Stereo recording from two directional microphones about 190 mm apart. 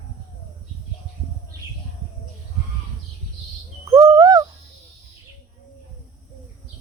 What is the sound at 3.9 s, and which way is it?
Bird, 20° right (ahead or behind).